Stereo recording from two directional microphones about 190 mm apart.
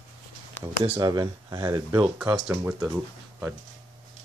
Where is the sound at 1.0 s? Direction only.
20° right (ahead or behind).